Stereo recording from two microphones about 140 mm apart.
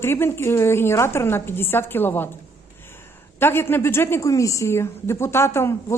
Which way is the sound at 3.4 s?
15° left (ahead or behind).